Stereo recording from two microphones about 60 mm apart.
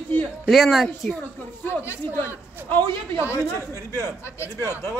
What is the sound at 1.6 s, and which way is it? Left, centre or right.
Speech, left.